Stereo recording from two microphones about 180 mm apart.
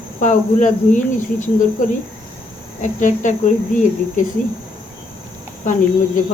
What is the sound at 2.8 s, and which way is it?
Speech, 45° left (ahead or behind).